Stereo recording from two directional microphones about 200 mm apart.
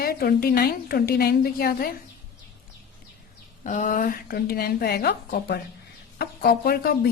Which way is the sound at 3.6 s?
40° left (ahead or behind).